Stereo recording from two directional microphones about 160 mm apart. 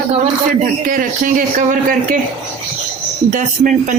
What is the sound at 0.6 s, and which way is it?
A man's voice, 60° right (ahead or behind).